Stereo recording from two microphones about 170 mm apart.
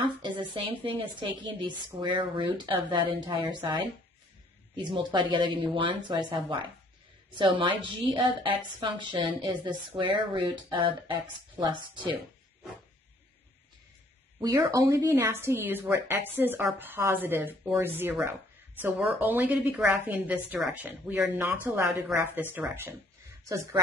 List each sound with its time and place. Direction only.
0.2 s a woman's voice: 30° right (ahead or behind)
14.4 s speech: 20° right (ahead or behind)